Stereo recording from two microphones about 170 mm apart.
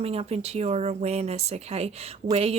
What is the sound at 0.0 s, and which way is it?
Speech, 35° right (ahead or behind).